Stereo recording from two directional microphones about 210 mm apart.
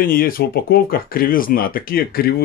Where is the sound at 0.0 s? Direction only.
45° left (ahead or behind).